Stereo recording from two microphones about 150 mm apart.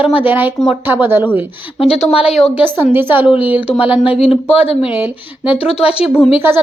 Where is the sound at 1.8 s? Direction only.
40° left (ahead or behind).